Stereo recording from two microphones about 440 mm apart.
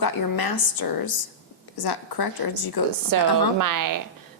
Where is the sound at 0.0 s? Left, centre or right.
Left.